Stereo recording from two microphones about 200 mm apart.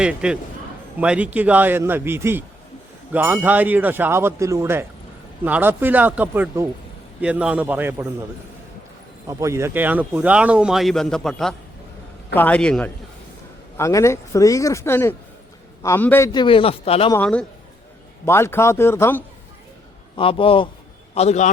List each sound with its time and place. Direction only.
0.0 s speech: 5° right (ahead or behind)
9.2 s a man's voice: 15° right (ahead or behind); by 17.1 s 30° left (ahead or behind)
17.1 s speech: 10° left (ahead or behind)
20.1 s a man's voice: 25° left (ahead or behind)